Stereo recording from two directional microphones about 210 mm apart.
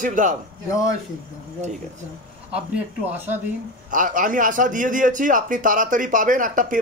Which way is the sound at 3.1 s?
10° right (ahead or behind).